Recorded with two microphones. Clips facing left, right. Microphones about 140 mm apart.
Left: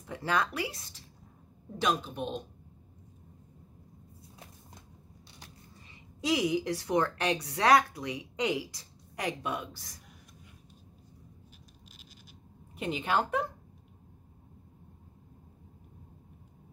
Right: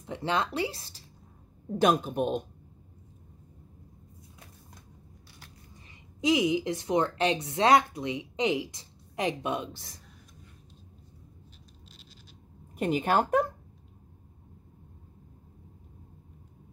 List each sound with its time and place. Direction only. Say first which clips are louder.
0.0 s speech: right 1 dB; 25° right (ahead or behind)
1.8 s speech: right 6 dB; 50° right (ahead or behind)
6.2 s speech: right 3 dB; 20° right (ahead or behind)
12.7 s speech: right 5 dB; 45° right (ahead or behind)